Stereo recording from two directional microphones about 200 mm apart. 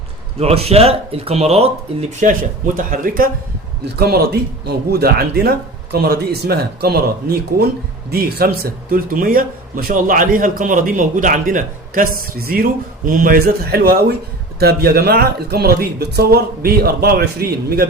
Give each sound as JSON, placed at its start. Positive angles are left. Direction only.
{"t": 0.3, "sound": "speech", "side_deg": -30}